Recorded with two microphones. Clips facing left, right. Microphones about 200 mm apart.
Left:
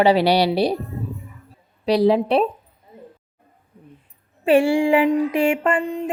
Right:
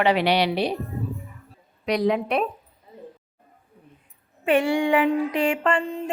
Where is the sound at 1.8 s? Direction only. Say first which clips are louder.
Left 6 dB; 30° left (ahead or behind).